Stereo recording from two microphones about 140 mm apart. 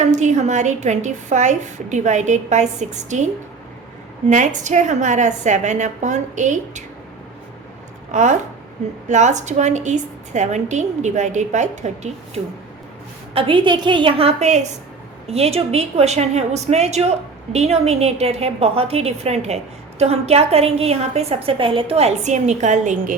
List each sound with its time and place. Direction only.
0.0 s a woman's voice: 60° right (ahead or behind)
4.3 s a woman's voice: 60° right (ahead or behind)
8.1 s a woman's voice: 60° right (ahead or behind)
13.3 s a woman's voice: 35° right (ahead or behind); by 23.1 s 65° right (ahead or behind)